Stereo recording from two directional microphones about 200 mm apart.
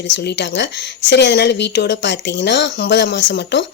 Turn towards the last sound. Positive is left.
turn(degrees=60)  # may be behind; listen again after turning